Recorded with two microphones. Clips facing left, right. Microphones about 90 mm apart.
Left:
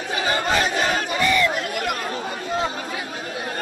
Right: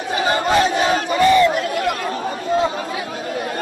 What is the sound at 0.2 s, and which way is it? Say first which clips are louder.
Battle cry: right 5 dB; 35° right (ahead or behind).